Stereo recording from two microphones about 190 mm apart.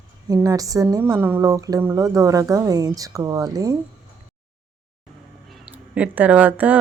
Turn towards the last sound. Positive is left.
turn(degrees=-10)  # may be behind; listen again after turning